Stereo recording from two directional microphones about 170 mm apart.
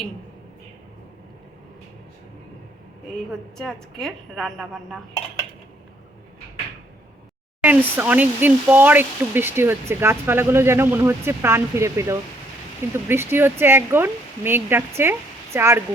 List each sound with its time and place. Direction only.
3.6 s a woman's voice: 5° left (ahead or behind)
7.6 s speech: 10° right (ahead or behind)